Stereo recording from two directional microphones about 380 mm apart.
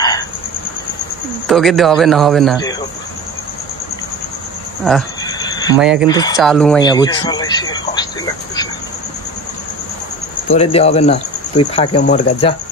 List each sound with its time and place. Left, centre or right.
1.5 s a man's voice: centre
4.8 s a sound: centre
5.8 s a man's voice: centre
6.0 s speech: centre
10.5 s speech: centre